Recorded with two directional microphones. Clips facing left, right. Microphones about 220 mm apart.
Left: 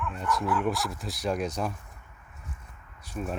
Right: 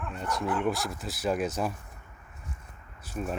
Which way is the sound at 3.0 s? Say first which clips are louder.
Even; 5° right (ahead or behind).